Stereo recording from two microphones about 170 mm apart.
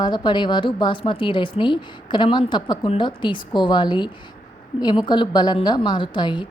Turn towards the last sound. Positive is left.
turn(degrees=25)  # may be behind; listen again after turning